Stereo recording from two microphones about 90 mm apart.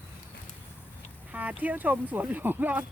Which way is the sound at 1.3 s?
15° right (ahead or behind).